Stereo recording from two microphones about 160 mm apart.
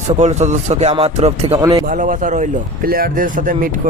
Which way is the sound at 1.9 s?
55° right (ahead or behind).